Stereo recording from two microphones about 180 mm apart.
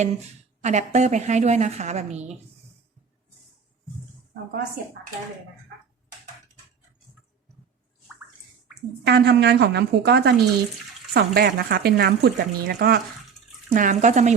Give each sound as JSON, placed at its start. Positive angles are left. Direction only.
{"t": 0.6, "sound": "a woman's voice", "side_deg": -40}
{"t": 9.0, "sound": "a woman's voice", "side_deg": -65}
{"t": 13.7, "sound": "speech", "side_deg": -45}